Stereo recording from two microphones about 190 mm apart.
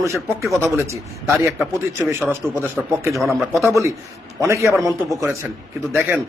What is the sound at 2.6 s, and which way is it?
Speech, 15° right (ahead or behind).